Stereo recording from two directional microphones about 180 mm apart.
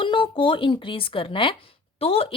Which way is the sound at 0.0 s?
30° left (ahead or behind).